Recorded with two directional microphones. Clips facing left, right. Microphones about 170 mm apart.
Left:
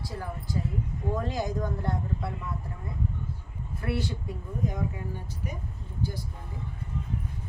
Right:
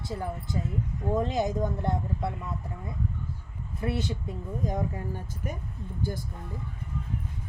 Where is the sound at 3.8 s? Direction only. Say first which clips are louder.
Right 1 dB; 20° right (ahead or behind).